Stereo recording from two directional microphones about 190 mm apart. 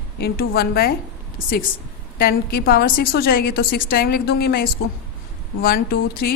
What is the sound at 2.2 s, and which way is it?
A woman's voice, 55° left (ahead or behind).